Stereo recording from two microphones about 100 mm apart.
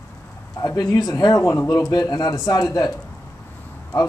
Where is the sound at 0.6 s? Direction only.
35° left (ahead or behind).